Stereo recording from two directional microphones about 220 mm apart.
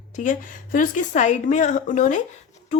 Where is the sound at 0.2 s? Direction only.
35° left (ahead or behind).